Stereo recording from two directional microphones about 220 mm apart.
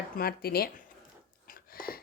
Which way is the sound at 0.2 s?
45° left (ahead or behind).